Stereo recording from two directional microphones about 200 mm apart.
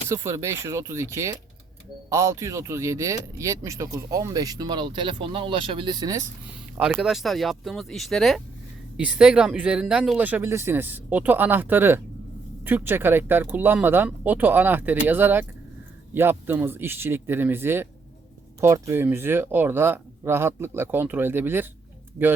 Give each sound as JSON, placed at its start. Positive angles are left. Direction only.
{"t": 0.1, "sound": "speech", "side_deg": -15}
{"t": 6.7, "sound": "speech", "side_deg": -5}